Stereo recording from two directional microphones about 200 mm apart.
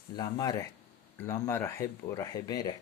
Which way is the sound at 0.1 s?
20° left (ahead or behind).